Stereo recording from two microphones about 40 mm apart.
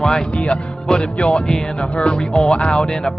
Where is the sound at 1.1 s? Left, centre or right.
Left.